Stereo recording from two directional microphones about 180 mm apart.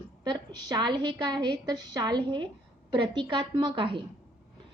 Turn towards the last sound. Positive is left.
turn(degrees=-30)  # may be behind; listen again after turning